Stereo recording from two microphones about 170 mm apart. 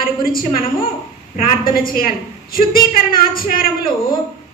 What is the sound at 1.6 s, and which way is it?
A woman's voice, 60° left (ahead or behind).